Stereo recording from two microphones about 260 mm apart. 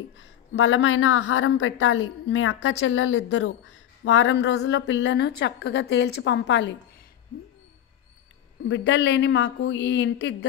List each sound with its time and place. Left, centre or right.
0.2 s a woman's voice: left
8.6 s a woman's voice: left